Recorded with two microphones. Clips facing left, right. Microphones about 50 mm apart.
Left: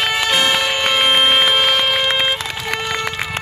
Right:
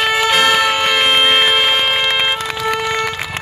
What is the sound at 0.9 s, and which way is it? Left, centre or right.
Music, right.